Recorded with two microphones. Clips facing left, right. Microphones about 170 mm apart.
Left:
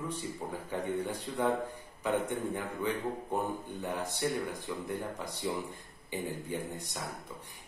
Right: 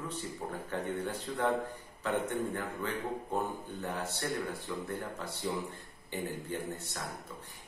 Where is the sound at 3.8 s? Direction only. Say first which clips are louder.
Left 3 dB; 15° left (ahead or behind).